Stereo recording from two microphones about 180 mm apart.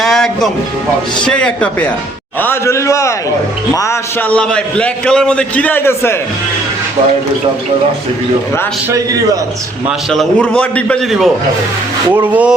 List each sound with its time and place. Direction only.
0.0 s music: centre (ahead or behind)
1.2 s a man's voice: 5° left (ahead or behind)
10.1 s a man's voice: 5° left (ahead or behind)
12.1 s speech: 10° right (ahead or behind)